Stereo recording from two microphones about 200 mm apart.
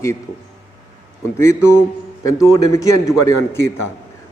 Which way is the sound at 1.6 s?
15° left (ahead or behind).